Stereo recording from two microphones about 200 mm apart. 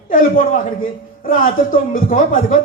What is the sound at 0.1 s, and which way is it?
A man's voice, 40° left (ahead or behind).